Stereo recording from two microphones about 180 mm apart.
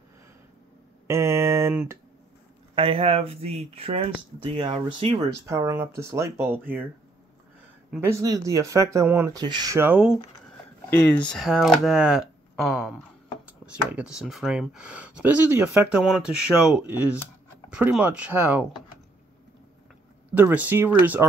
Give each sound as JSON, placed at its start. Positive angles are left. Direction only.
{"t": 1.0, "sound": "speech", "side_deg": -15}
{"t": 2.7, "sound": "speech", "side_deg": -30}
{"t": 5.5, "sound": "speech", "side_deg": -15}
{"t": 7.9, "sound": "speech", "side_deg": -15}
{"t": 10.9, "sound": "speech", "side_deg": 10}
{"t": 20.3, "sound": "speech", "side_deg": -10}